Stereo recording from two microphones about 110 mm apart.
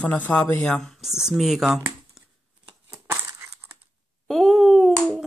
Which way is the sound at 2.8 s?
25° right (ahead or behind).